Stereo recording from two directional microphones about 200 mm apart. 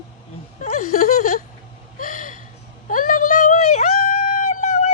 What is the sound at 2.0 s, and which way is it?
Gasp, 40° left (ahead or behind).